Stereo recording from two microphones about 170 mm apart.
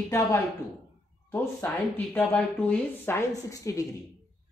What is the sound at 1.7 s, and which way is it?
A woman's voice, 5° left (ahead or behind).